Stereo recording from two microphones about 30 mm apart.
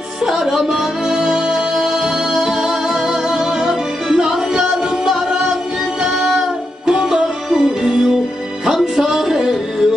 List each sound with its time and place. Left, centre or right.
0.2 s music: centre
8.9 s music: centre